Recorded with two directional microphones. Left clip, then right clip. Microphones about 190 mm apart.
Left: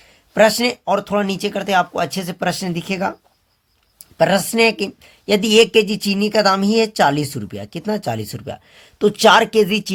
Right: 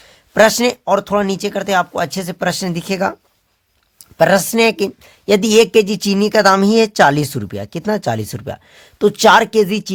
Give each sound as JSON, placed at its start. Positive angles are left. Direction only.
{"t": 0.0, "sound": "speech", "side_deg": -35}
{"t": 4.2, "sound": "speech", "side_deg": -35}